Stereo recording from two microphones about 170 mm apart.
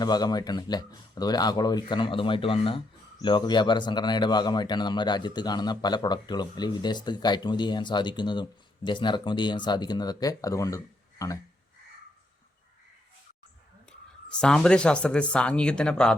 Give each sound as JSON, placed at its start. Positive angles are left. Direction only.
{"t": 0.0, "sound": "speech", "side_deg": 25}
{"t": 14.3, "sound": "speech", "side_deg": 5}